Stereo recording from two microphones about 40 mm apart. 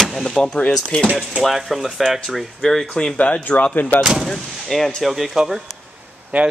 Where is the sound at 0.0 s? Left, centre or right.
Centre.